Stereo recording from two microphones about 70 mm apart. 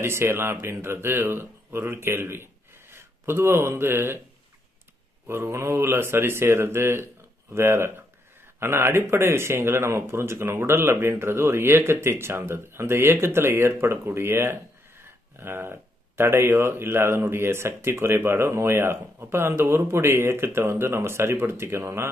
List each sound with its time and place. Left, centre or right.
0.0 s speech: right
5.2 s speech: right